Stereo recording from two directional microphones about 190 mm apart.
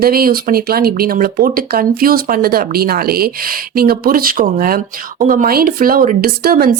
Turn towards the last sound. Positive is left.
turn(degrees=-50)  # may be behind; listen again after turning